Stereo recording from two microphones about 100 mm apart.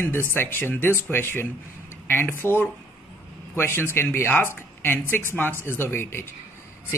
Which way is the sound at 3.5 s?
25° left (ahead or behind).